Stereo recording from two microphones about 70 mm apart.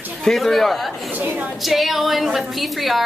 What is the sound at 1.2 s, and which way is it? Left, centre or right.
Speech, right.